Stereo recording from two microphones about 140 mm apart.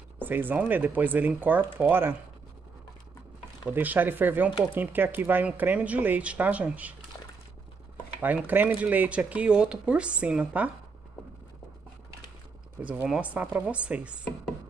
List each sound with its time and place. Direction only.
0.2 s speech: 15° right (ahead or behind)
3.6 s speech: 10° right (ahead or behind)
8.2 s speech: 10° right (ahead or behind)
12.8 s speech: 10° right (ahead or behind)